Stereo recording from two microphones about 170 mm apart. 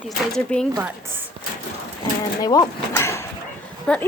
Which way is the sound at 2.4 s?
20° left (ahead or behind).